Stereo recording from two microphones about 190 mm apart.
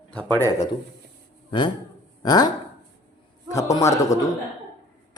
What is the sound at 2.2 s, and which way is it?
A man's voice, 20° left (ahead or behind).